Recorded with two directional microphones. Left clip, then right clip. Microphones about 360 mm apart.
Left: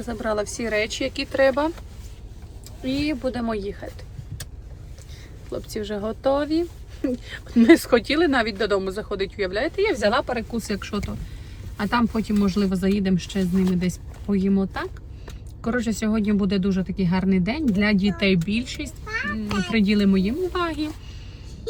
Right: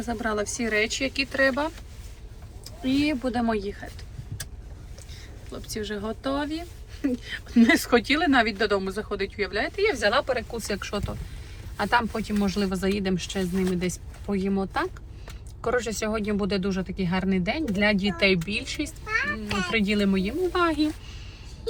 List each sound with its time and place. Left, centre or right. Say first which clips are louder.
0.0 s speech: left 2 dB; centre
2.8 s speech: even; centre
5.5 s speech: left 4 dB; centre